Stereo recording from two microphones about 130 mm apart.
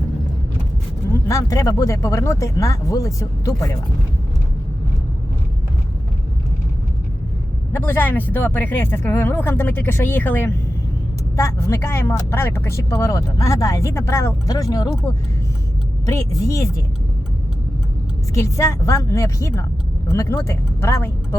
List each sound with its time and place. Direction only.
1.3 s speech: 25° left (ahead or behind)
7.7 s speech: 15° left (ahead or behind)
16.0 s speech: 25° left (ahead or behind)
18.3 s speech: 25° left (ahead or behind)